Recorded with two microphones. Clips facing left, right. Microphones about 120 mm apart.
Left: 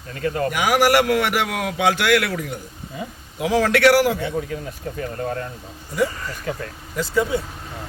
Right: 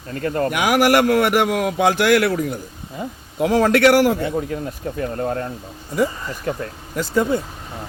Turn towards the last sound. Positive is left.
turn(degrees=-50)  # may be behind; listen again after turning